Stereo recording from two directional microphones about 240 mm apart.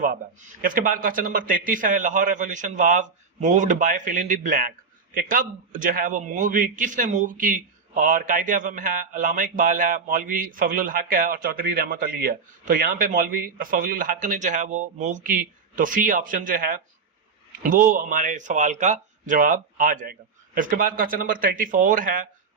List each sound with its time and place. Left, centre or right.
0.6 s a man's voice: right